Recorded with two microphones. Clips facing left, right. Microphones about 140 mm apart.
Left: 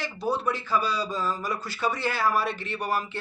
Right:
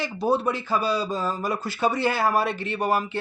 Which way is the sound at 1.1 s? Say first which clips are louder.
Right 3 dB; 25° right (ahead or behind).